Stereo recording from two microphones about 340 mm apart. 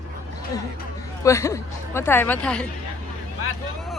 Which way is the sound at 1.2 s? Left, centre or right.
Centre.